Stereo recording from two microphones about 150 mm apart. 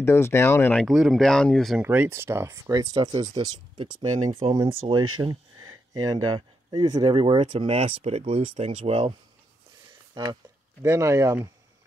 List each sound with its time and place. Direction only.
0.0 s speech: 15° left (ahead or behind)
0.8 s speech: centre (ahead or behind)
1.8 s speech: 10° right (ahead or behind); by 9.1 s 40° right (ahead or behind)
10.1 s speech: 30° right (ahead or behind)
10.8 s speech: 20° right (ahead or behind)